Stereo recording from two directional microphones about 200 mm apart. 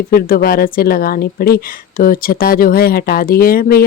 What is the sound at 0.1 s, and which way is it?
Speech, 50° left (ahead or behind).